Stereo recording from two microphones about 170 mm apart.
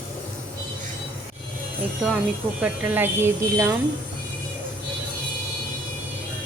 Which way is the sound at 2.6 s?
10° right (ahead or behind).